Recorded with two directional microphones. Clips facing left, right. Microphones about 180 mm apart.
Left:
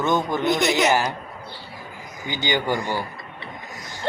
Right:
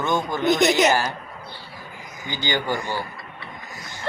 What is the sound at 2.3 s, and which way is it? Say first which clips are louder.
Speech: left 2 dB; 15° left (ahead or behind).